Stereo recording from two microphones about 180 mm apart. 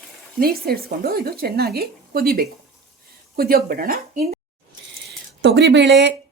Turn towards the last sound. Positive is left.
turn(degrees=-75)  # may be behind; listen again after turning